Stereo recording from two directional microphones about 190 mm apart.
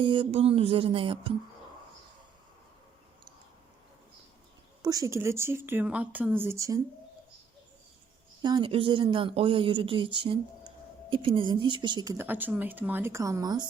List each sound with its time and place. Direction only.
0.0 s speech: 25° right (ahead or behind)
4.8 s speech: 20° right (ahead or behind)
8.4 s speech: 25° right (ahead or behind)